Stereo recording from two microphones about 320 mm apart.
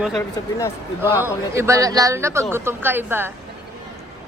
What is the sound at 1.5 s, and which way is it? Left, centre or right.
A woman's voice, centre.